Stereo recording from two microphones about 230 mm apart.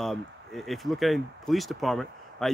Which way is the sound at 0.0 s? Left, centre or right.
Centre.